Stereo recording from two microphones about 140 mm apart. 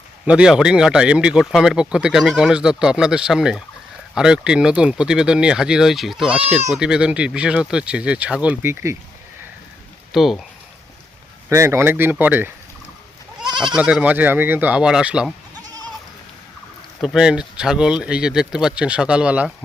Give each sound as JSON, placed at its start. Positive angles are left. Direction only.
{"t": 0.3, "sound": "speech", "side_deg": -5}
{"t": 10.1, "sound": "speech", "side_deg": 0}
{"t": 11.4, "sound": "speech", "side_deg": -20}
{"t": 13.7, "sound": "speech", "side_deg": -5}
{"t": 15.6, "sound": "goat", "side_deg": -25}
{"t": 17.0, "sound": "speech", "side_deg": 0}